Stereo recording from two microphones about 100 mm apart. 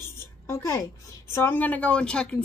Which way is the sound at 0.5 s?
25° left (ahead or behind).